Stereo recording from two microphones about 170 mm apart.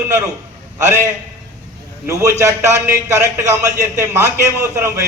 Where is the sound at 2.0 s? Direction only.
15° right (ahead or behind).